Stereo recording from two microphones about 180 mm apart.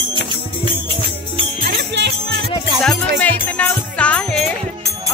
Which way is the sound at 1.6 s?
70° right (ahead or behind).